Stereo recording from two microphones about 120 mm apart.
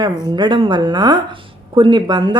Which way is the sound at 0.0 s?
35° right (ahead or behind).